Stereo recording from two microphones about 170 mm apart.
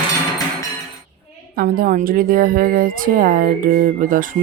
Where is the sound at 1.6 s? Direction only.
60° right (ahead or behind).